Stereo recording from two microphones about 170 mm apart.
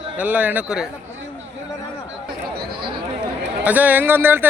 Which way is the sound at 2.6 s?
65° right (ahead or behind).